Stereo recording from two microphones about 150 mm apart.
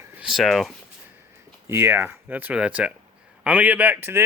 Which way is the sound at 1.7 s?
15° right (ahead or behind).